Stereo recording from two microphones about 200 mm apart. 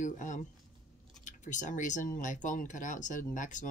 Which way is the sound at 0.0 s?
40° left (ahead or behind).